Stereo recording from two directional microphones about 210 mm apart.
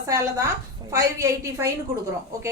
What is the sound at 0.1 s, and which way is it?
A woman's voice, 15° right (ahead or behind).